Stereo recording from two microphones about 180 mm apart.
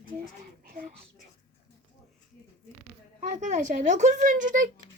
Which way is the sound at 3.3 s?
40° right (ahead or behind).